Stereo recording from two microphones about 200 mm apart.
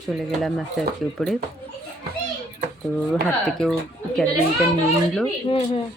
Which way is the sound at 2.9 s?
Centre (ahead or behind).